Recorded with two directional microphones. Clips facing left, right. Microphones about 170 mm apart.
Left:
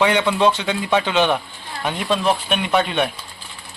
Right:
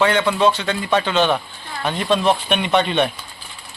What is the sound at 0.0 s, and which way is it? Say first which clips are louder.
A man's voice: even; 15° left (ahead or behind).